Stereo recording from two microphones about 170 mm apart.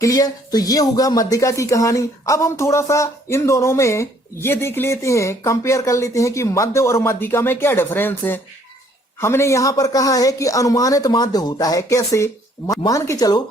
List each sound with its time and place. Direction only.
0.0 s speech: 20° left (ahead or behind)